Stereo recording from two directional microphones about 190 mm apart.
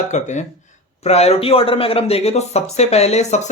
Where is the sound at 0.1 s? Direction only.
40° left (ahead or behind).